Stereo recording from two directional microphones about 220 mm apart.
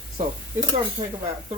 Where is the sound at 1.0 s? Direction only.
20° right (ahead or behind).